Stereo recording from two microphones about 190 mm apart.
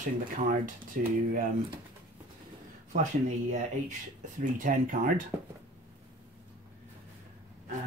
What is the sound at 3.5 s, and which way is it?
Speech, 40° right (ahead or behind).